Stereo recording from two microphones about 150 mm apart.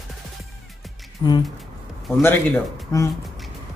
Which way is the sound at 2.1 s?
15° left (ahead or behind).